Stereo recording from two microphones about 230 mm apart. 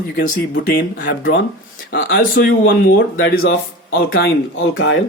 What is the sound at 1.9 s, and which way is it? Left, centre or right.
Speech, left.